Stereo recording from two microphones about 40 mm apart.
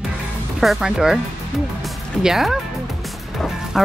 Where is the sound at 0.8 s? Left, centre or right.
Centre.